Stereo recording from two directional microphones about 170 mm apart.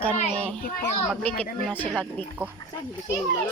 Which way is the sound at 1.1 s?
5° left (ahead or behind).